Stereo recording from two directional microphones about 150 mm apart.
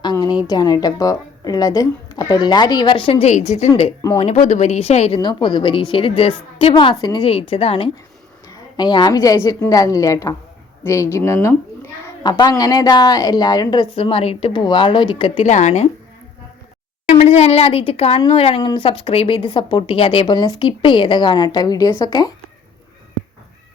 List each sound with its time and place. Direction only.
0.0 s a sound: 25° left (ahead or behind)
0.4 s a woman's voice: 25° left (ahead or behind); by 5.2 s 45° left (ahead or behind)
5.2 s speech: 30° left (ahead or behind)
8.4 s a woman's voice: 30° left (ahead or behind)
15.4 s speech: 50° left (ahead or behind)
17.1 s speech: 45° left (ahead or behind); by 22.4 s 25° left (ahead or behind)